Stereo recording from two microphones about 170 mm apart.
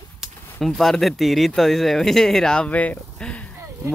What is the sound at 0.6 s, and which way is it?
Speech, centre (ahead or behind).